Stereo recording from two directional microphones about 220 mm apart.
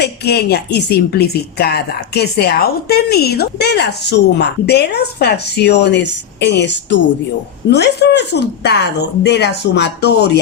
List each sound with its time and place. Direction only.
0.0 s speech: 45° left (ahead or behind)